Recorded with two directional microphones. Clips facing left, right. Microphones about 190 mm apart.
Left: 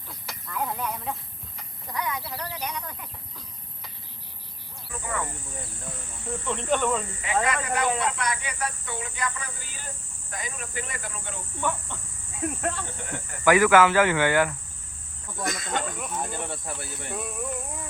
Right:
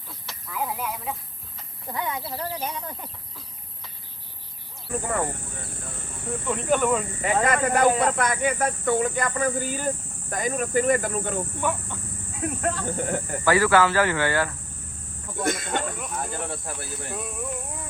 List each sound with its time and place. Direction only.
0.3 s a sound: centre (ahead or behind)
1.9 s speech: 25° right (ahead or behind)
4.9 s speech: 55° right (ahead or behind)
6.2 s speech: 5° right (ahead or behind)
7.4 s speech: 55° right (ahead or behind)
12.4 s speech: centre (ahead or behind)
12.8 s speech: 40° right (ahead or behind)
13.4 s speech: 15° left (ahead or behind)
15.7 s speech: centre (ahead or behind)